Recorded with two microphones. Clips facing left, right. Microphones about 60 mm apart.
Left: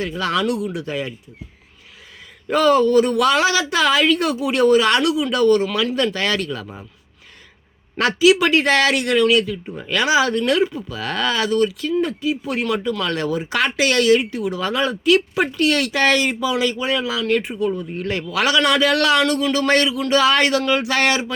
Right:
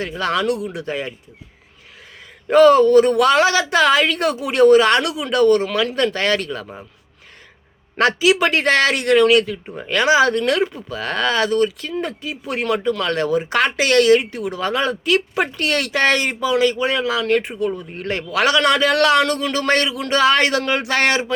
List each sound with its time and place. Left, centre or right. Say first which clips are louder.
0.1 s a woman's voice: right 3 dB; right
2.5 s speech: right 4 dB; right
7.9 s a woman's voice: left 1 dB; right